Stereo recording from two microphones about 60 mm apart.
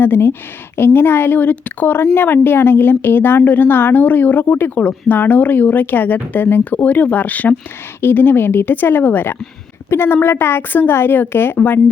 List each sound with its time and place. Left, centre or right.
0.0 s a woman's voice: left
4.8 s a woman's voice: left